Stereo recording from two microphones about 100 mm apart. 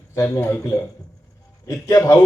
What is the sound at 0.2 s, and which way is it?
Speech, 30° left (ahead or behind).